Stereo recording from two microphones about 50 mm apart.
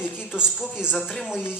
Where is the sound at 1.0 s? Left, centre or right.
Centre.